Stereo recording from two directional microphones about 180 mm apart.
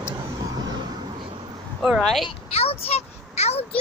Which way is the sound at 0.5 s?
20° right (ahead or behind).